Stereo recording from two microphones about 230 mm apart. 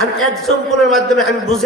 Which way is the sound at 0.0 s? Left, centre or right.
Centre.